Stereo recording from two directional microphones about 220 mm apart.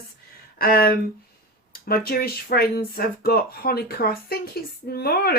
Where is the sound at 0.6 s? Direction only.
45° left (ahead or behind).